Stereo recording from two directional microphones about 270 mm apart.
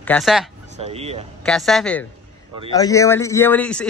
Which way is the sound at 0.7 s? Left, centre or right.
Right.